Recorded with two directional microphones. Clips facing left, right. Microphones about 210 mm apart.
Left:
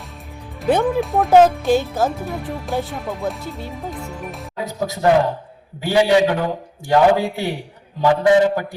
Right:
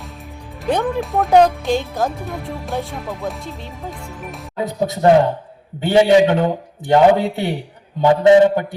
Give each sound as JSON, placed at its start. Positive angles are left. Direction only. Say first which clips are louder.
{"t": 0.6, "sound": "speech", "louder": "left 2 dB", "side_deg": 5}
{"t": 4.6, "sound": "a man's voice", "louder": "right 3 dB", "side_deg": -25}